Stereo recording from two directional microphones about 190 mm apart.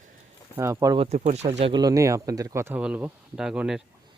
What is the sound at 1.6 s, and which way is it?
Speech, 25° right (ahead or behind).